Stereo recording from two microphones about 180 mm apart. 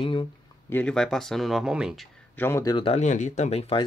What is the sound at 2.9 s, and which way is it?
Speech, 40° left (ahead or behind).